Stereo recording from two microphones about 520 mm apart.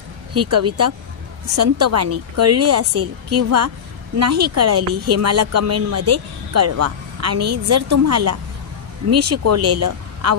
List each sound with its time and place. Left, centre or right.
0.3 s a woman's voice: right